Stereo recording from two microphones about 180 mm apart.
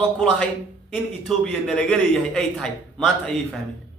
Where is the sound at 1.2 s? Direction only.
5° left (ahead or behind).